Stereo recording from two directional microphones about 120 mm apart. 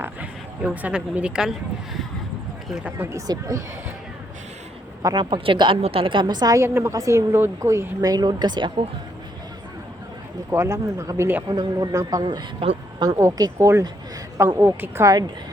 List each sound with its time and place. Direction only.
0.0 s speech: 10° right (ahead or behind)
2.8 s speech: 15° right (ahead or behind)
3.2 s speech: 30° right (ahead or behind)
5.1 s a woman's voice: 45° right (ahead or behind)
10.5 s speech: 25° right (ahead or behind)
12.2 s a woman's voice: 50° right (ahead or behind)
13.0 s speech: 25° right (ahead or behind)